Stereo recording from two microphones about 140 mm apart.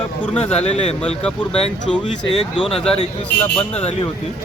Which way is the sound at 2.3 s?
40° left (ahead or behind).